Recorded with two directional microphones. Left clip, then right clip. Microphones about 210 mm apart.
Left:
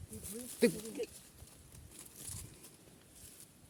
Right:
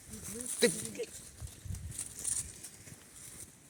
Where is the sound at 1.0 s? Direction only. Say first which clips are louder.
Even; 30° left (ahead or behind).